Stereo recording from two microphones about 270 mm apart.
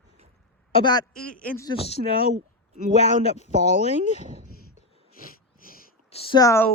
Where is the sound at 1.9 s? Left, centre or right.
Left.